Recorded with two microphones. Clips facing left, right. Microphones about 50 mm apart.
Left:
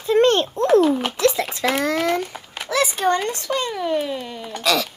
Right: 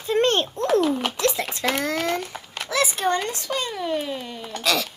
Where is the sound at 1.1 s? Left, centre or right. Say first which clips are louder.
Left 5 dB; left.